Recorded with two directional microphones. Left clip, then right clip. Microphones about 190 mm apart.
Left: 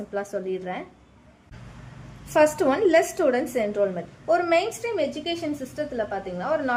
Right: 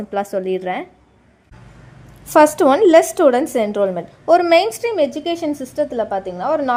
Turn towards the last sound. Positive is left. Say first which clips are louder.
# right 7 dB
turn(degrees=-35)  # may be behind; listen again after turning